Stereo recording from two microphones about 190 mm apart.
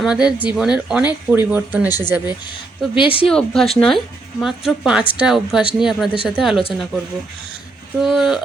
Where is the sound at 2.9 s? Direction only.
30° left (ahead or behind).